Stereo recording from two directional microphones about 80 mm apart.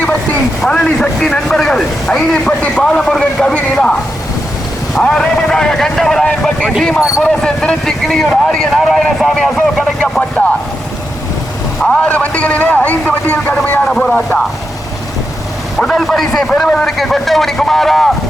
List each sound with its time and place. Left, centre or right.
0.6 s a man's voice: centre
5.0 s a man's voice: centre
11.8 s speech: centre
12.0 s a man's voice: centre
15.8 s speech: centre